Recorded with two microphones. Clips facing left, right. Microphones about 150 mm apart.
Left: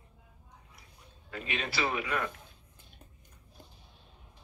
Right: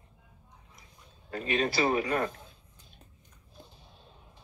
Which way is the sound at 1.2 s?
40° right (ahead or behind).